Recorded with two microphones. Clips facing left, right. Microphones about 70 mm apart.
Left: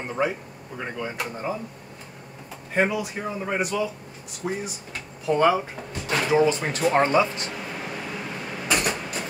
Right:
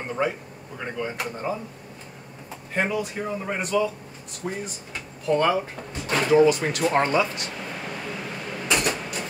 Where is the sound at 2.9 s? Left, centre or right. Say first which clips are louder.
Right 1 dB; centre.